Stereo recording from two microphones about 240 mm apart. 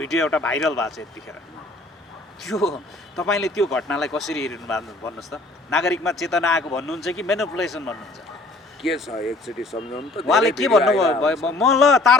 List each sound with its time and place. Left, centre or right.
0.1 s speech: centre
2.4 s speech: centre
9.7 s speech: left
10.2 s speech: centre